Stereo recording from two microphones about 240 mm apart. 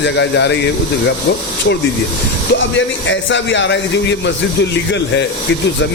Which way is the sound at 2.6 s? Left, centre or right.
Left.